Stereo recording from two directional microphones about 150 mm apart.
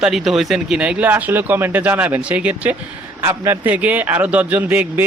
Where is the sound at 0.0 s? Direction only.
Centre (ahead or behind).